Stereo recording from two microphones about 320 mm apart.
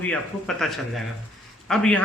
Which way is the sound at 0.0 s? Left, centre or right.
Centre.